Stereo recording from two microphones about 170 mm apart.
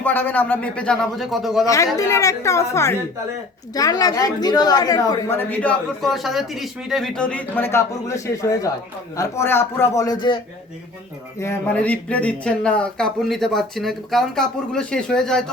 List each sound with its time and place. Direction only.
0.0 s a woman's voice: 10° left (ahead or behind)
1.6 s a man's voice: 20° left (ahead or behind)
11.3 s speech: 10° left (ahead or behind)